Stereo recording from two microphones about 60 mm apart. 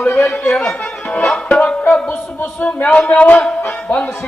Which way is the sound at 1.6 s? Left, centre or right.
Left.